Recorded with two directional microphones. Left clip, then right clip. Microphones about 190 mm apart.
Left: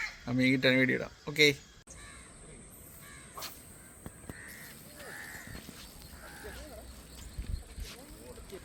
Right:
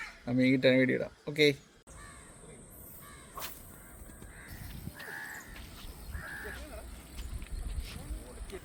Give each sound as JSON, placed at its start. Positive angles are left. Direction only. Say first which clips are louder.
{"t": 0.3, "sound": "speech", "louder": "right 1 dB", "side_deg": -15}